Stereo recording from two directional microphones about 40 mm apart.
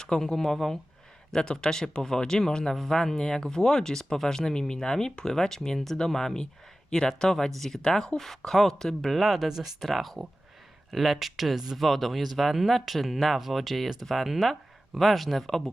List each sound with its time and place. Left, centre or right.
0.0 s speech: centre